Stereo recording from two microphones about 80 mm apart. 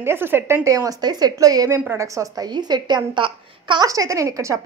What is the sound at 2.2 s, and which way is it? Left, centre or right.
A woman's voice, right.